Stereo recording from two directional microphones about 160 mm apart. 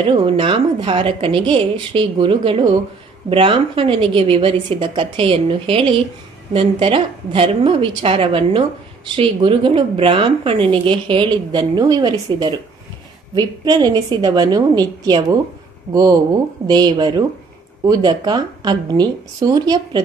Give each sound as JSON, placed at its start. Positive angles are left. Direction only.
{"t": 0.0, "sound": "a woman's voice", "side_deg": -35}